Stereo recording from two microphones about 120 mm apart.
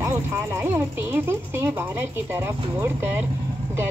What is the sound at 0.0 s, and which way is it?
Speech, 20° right (ahead or behind).